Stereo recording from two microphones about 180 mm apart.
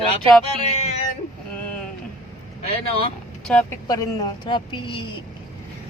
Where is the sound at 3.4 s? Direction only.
5° left (ahead or behind).